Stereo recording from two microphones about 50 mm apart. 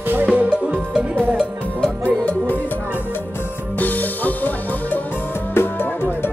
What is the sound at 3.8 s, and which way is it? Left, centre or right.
Music, left.